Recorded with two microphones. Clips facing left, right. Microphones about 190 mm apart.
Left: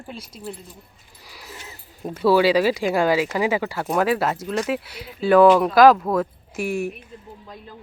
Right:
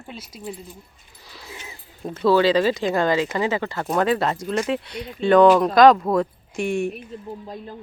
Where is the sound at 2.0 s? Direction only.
10° left (ahead or behind).